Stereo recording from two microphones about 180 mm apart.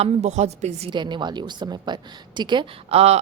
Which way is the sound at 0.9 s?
25° right (ahead or behind).